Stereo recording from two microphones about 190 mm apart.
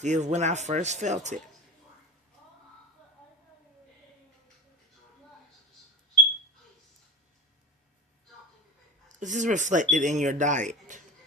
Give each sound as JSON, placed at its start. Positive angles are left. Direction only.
{"t": 0.0, "sound": "speech", "side_deg": -40}
{"t": 9.2, "sound": "speech", "side_deg": -40}